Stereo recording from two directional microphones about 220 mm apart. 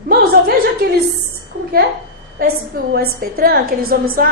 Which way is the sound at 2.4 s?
40° right (ahead or behind).